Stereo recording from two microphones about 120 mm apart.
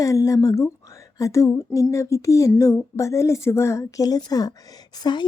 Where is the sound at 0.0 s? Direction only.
25° left (ahead or behind).